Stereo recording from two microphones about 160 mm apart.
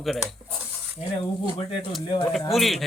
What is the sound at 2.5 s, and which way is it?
Speech, centre (ahead or behind).